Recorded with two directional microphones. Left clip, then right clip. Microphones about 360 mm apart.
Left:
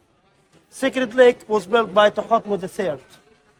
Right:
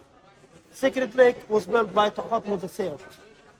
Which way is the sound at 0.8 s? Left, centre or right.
Left.